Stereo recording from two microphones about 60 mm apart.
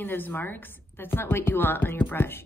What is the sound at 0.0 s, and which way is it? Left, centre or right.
Speech, left.